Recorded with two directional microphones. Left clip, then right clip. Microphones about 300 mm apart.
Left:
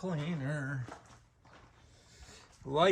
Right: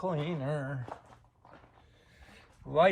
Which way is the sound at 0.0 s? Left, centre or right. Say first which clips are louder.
Right 5 dB; centre.